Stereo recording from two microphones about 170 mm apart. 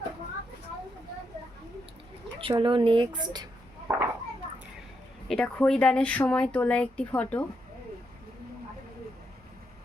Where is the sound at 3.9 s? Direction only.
15° right (ahead or behind).